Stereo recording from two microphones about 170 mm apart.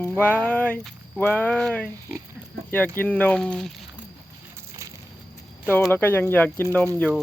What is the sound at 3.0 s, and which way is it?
Speech, 10° left (ahead or behind).